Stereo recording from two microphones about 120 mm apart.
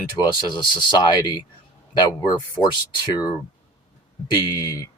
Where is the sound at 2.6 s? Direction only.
35° left (ahead or behind).